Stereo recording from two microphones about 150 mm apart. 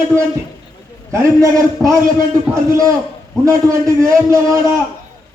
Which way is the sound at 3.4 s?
20° right (ahead or behind).